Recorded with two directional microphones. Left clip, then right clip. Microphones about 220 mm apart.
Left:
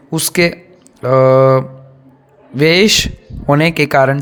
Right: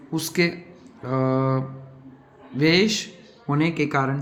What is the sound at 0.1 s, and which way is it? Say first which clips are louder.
A man's voice: left 9 dB; 50° left (ahead or behind).